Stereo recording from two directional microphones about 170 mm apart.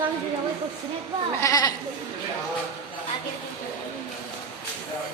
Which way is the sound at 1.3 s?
20° left (ahead or behind).